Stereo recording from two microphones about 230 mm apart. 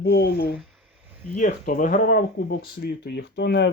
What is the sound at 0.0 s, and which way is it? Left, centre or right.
Speech, left.